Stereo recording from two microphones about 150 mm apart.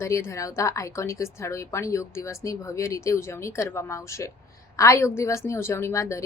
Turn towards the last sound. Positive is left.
turn(degrees=20)  # may be behind; listen again after turning